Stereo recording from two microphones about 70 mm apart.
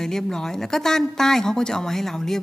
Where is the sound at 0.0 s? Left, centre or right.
Centre.